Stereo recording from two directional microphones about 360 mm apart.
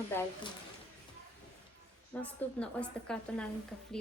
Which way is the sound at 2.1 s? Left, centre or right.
Centre.